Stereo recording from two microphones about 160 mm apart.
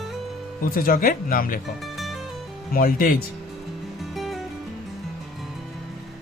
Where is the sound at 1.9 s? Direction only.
Centre (ahead or behind).